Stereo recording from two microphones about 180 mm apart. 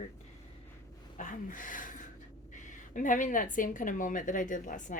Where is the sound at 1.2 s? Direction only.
45° left (ahead or behind).